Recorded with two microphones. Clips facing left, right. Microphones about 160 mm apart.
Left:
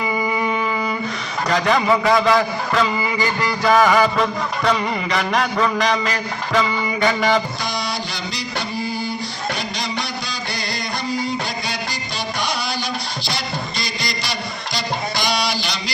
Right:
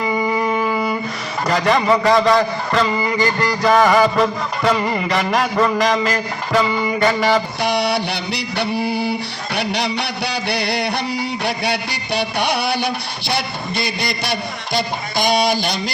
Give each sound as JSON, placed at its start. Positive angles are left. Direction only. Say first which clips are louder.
{"t": 0.0, "sound": "music", "louder": "right 2 dB", "side_deg": 5}
{"t": 1.5, "sound": "a man's voice", "louder": "right 2 dB", "side_deg": 0}
{"t": 7.6, "sound": "music", "louder": "right 7 dB", "side_deg": -65}